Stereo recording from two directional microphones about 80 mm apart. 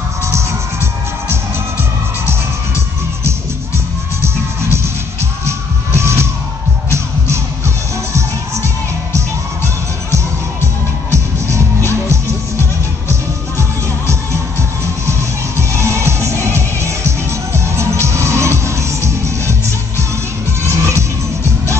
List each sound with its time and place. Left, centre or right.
5.9 s music: right
13.1 s music: right
15.8 s music: right
20.6 s crowd: right